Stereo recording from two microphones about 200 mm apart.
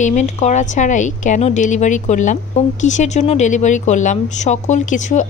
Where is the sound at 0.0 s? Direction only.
35° left (ahead or behind).